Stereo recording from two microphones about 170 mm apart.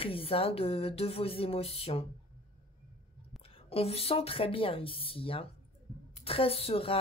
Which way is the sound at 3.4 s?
35° left (ahead or behind).